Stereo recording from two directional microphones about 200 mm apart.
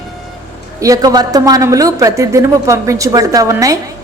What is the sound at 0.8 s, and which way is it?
Speech, 15° right (ahead or behind).